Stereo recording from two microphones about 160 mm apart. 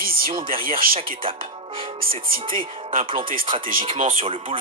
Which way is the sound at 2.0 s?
65° right (ahead or behind).